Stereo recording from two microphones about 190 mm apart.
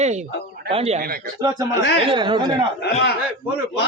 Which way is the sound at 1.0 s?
50° right (ahead or behind).